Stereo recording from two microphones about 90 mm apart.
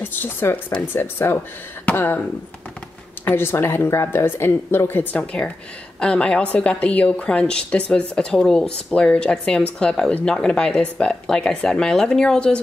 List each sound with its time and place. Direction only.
0.0 s a woman's voice: 20° left (ahead or behind)
3.3 s a woman's voice: 25° left (ahead or behind); by 12.5 s 5° left (ahead or behind)